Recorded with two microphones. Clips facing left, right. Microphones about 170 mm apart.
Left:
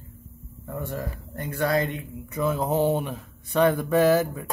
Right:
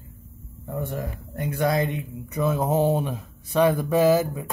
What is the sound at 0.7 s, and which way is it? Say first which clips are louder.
Speech: right 2 dB; 20° right (ahead or behind).